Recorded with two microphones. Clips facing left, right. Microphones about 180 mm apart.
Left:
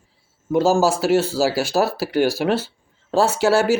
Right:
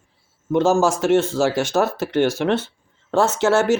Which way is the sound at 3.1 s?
35° left (ahead or behind).